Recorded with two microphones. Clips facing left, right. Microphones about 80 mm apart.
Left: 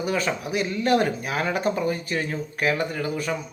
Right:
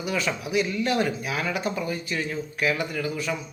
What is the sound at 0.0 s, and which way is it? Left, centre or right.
Speech, left.